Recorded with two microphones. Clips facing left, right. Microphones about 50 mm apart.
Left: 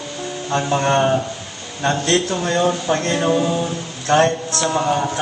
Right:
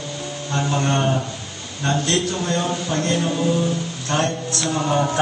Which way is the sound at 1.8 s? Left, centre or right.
Left.